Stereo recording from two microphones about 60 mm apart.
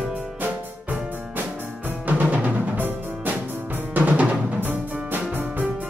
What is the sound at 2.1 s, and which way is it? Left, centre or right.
Music, right.